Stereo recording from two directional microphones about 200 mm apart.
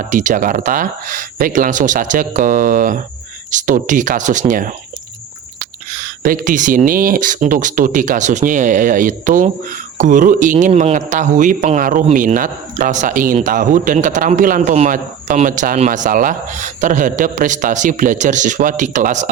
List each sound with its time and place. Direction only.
0.1 s speech: 40° right (ahead or behind)